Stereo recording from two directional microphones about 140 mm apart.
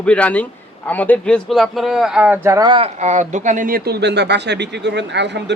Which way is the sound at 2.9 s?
55° right (ahead or behind).